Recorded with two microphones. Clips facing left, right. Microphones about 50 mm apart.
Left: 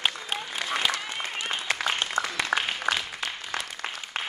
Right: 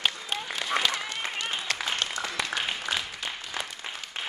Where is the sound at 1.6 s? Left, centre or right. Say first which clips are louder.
Left 4 dB; centre.